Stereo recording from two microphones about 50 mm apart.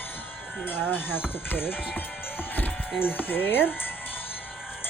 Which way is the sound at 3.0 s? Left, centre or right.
Left.